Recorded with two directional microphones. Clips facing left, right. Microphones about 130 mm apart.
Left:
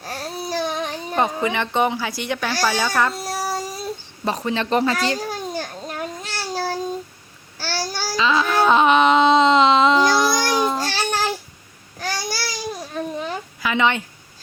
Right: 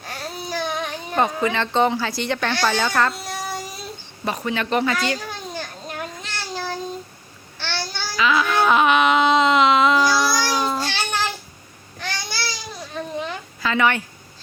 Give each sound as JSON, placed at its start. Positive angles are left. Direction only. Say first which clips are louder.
{"t": 0.0, "sound": "babbling", "louder": "left 3 dB", "side_deg": 35}
{"t": 1.1, "sound": "speech", "louder": "right 1 dB", "side_deg": 20}
{"t": 3.2, "sound": "child singing", "louder": "left 4 dB", "side_deg": 40}
{"t": 4.3, "sound": "a child's voice", "louder": "left 2 dB", "side_deg": 30}
{"t": 6.2, "sound": "child singing", "louder": "left 5 dB", "side_deg": 35}
{"t": 7.6, "sound": "babbling", "louder": "left 3 dB", "side_deg": 40}
{"t": 10.5, "sound": "a sound", "louder": "left 2 dB", "side_deg": 15}
{"t": 10.8, "sound": "child singing", "louder": "left 2 dB", "side_deg": 40}
{"t": 11.9, "sound": "babbling", "louder": "left 3 dB", "side_deg": 40}
{"t": 13.1, "sound": "a sound", "louder": "left 1 dB", "side_deg": 10}